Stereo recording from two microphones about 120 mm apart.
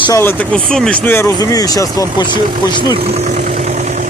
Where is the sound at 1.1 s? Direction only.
20° left (ahead or behind).